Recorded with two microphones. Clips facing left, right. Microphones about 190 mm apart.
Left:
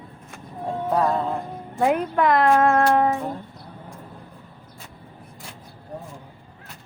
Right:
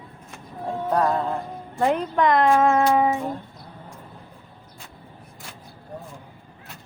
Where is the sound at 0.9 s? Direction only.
Centre (ahead or behind).